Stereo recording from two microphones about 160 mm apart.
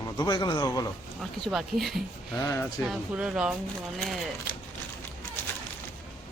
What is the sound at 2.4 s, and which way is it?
Speech, 20° left (ahead or behind).